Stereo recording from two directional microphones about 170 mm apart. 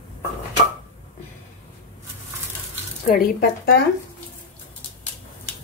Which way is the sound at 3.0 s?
60° left (ahead or behind).